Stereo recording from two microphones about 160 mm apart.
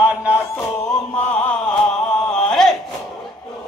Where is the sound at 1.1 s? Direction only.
10° left (ahead or behind).